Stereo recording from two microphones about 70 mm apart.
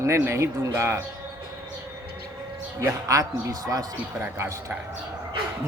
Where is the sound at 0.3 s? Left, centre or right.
Right.